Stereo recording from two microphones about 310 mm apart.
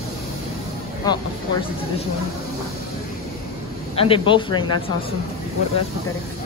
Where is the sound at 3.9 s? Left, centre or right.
Centre.